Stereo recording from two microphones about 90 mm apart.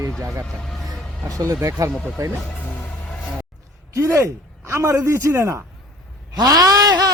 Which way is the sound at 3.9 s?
35° right (ahead or behind).